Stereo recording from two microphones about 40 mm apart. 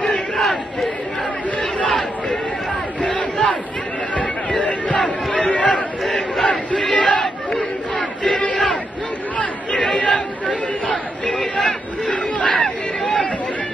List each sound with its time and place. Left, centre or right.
0.4 s crowd: centre
3.0 s crowd: left
4.1 s a sound: left
5.4 s chatter: left
6.0 s battle cry: centre
6.4 s battle cry: left
7.0 s crowd: left
9.4 s chatter: left
11.3 s hubbub: centre
12.1 s chatter: left